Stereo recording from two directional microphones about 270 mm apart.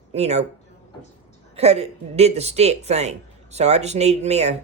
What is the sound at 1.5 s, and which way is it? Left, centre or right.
Speech, right.